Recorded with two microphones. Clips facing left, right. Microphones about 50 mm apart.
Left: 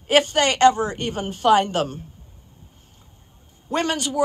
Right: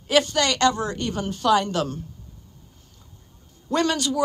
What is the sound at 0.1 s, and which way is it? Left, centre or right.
A woman's voice, left.